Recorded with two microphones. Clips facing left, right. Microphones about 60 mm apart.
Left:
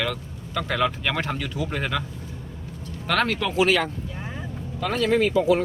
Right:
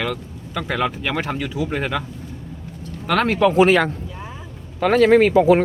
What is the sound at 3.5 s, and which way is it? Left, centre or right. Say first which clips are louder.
Speech: right 5 dB; right.